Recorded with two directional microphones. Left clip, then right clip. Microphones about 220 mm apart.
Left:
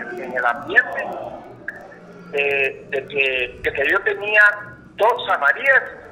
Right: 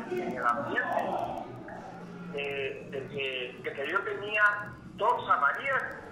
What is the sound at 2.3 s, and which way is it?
Speech, 25° left (ahead or behind).